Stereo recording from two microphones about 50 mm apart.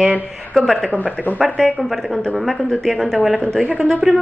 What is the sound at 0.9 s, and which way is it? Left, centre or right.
Speech, left.